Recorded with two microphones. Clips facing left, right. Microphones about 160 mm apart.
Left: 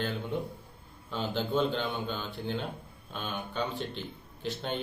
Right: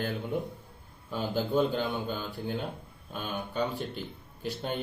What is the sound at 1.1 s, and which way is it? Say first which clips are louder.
Speech: right 2 dB; 10° right (ahead or behind).